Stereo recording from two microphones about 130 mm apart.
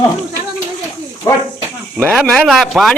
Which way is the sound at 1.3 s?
25° left (ahead or behind).